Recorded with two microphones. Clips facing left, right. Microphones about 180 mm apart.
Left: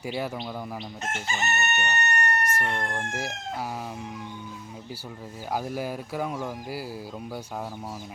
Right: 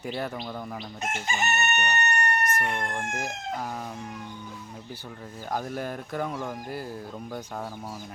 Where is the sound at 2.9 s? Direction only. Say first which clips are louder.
Even; 10° left (ahead or behind).